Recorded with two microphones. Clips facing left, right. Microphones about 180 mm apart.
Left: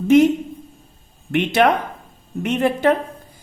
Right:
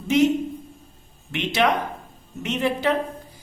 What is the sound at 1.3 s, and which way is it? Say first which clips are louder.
Speech: left 5 dB; 55° left (ahead or behind).